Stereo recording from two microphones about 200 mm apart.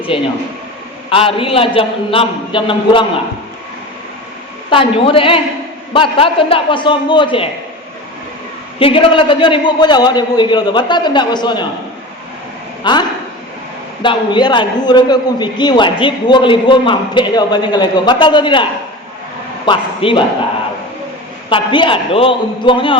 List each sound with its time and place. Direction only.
0.1 s a man's voice: 25° left (ahead or behind)
4.7 s a man's voice: 25° left (ahead or behind)
8.8 s a man's voice: 25° left (ahead or behind)
12.8 s a man's voice: 20° left (ahead or behind)
21.5 s a man's voice: 25° left (ahead or behind)